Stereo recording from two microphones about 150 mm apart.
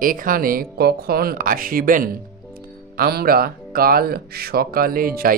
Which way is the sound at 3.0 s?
85° right.